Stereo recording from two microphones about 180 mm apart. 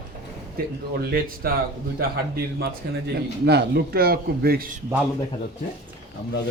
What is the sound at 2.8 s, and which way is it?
A man's voice, 70° right (ahead or behind).